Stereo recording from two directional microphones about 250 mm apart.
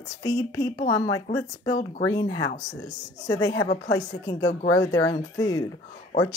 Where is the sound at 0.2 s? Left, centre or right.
Centre.